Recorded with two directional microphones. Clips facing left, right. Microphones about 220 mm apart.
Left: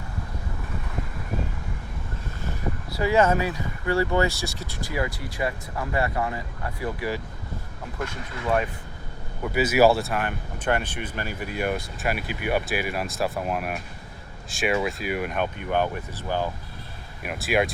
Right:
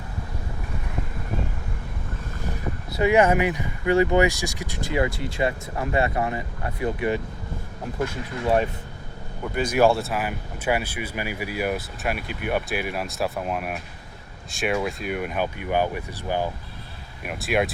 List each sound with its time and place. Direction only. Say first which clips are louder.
2.9 s speech: right 2 dB; 20° right (ahead or behind)
9.4 s speech: left 1 dB; 5° left (ahead or behind); by 16.5 s 15° right (ahead or behind)
17.2 s speech: even; centre (ahead or behind)